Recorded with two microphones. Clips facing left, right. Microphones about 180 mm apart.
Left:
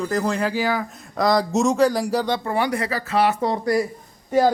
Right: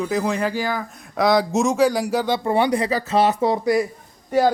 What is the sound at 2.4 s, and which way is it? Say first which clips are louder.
Speech: right 4 dB; 20° right (ahead or behind).